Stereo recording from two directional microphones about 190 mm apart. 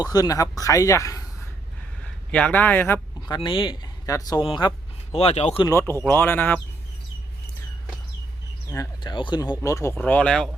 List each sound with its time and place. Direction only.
0.0 s speech: 20° left (ahead or behind)
2.0 s a sound: 5° left (ahead or behind)
3.3 s speech: 25° left (ahead or behind)
5.6 s speech: 15° left (ahead or behind)
8.7 s speech: 20° left (ahead or behind); by 10.5 s 5° left (ahead or behind)